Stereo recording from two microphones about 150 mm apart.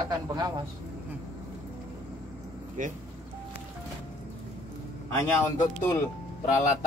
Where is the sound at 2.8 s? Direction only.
60° right (ahead or behind).